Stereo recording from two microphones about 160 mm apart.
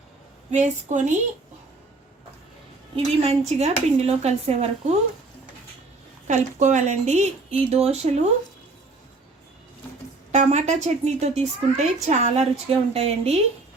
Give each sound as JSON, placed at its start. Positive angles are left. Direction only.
{"t": 0.5, "sound": "a woman's voice", "side_deg": -45}
{"t": 3.2, "sound": "a woman's voice", "side_deg": -40}
{"t": 6.2, "sound": "a woman's voice", "side_deg": -50}
{"t": 10.3, "sound": "a woman's voice", "side_deg": -45}